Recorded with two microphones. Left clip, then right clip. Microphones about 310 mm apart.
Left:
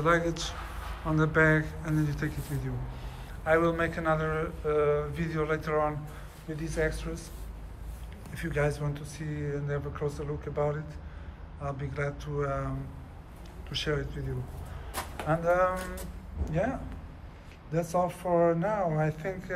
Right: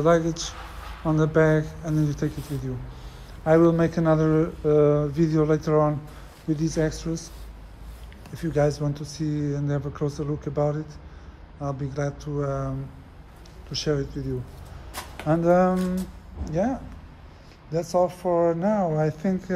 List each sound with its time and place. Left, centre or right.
0.0 s speech: centre
8.4 s speech: centre
14.9 s a sound: centre
15.4 s speech: centre